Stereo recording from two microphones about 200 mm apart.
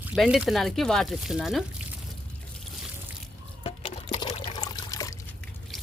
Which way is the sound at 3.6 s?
35° left (ahead or behind).